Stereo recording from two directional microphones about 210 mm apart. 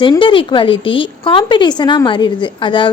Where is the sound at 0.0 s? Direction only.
25° left (ahead or behind).